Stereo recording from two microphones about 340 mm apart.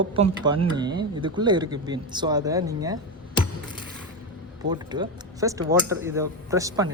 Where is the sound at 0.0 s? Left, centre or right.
Centre.